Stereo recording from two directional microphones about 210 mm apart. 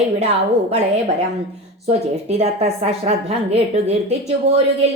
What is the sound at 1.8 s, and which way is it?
A woman's voice, 30° right (ahead or behind).